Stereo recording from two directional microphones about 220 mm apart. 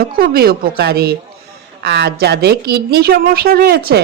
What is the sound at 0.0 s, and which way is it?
A woman's voice, 45° right (ahead or behind).